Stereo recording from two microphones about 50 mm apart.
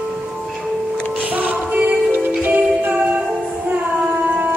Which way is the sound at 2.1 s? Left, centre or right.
Right.